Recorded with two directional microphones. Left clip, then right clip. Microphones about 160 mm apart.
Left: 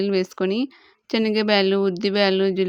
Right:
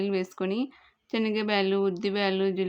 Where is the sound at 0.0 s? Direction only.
40° left (ahead or behind).